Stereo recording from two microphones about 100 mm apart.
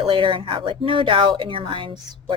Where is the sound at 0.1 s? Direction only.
60° right (ahead or behind).